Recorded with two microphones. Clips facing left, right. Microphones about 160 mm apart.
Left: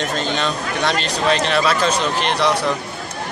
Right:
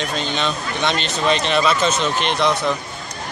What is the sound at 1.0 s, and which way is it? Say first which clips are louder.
Speech: left 1 dB; 35° left (ahead or behind).